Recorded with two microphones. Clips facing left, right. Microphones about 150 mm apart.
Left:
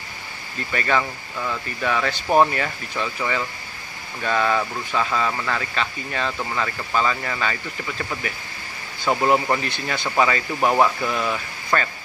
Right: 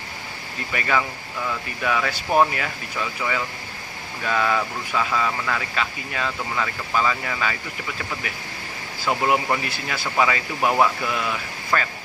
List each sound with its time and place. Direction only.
0.7 s speech: 5° right (ahead or behind)
9.0 s speech: 5° left (ahead or behind)